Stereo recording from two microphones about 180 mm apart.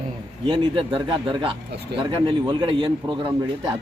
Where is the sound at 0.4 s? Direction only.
30° right (ahead or behind).